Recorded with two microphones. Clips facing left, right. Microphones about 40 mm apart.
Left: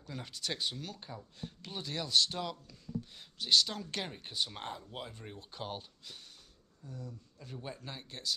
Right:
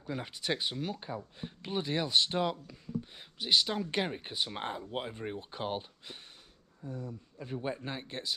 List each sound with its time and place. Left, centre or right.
0.0 s speech: right